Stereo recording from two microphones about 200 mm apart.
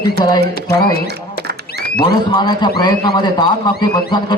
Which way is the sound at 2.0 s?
25° left (ahead or behind).